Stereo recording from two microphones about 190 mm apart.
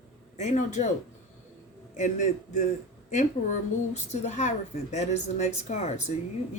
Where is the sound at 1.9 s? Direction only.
40° left (ahead or behind).